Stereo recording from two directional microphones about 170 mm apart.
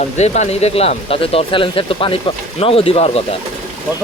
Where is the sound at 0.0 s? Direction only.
40° left (ahead or behind).